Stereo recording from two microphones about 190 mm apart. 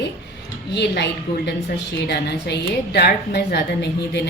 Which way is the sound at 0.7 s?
65° left (ahead or behind).